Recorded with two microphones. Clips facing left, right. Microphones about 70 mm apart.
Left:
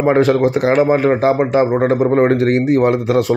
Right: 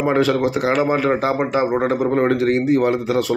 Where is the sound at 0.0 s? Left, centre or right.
Left.